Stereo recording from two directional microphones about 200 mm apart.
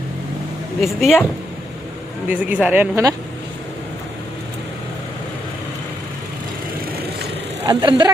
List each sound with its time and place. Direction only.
0.8 s speech: centre (ahead or behind)
2.3 s speech: 5° right (ahead or behind)
7.6 s speech: 20° right (ahead or behind)